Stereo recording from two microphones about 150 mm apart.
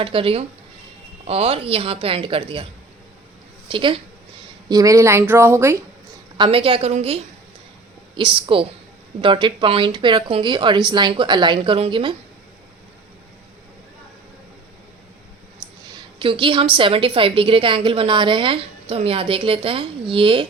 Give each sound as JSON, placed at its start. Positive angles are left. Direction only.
{"t": 0.0, "sound": "a woman's voice", "side_deg": -35}
{"t": 3.7, "sound": "a woman's voice", "side_deg": -35}
{"t": 4.7, "sound": "a woman's voice", "side_deg": -25}
{"t": 6.3, "sound": "a woman's voice", "side_deg": -35}
{"t": 16.1, "sound": "a woman's voice", "side_deg": -35}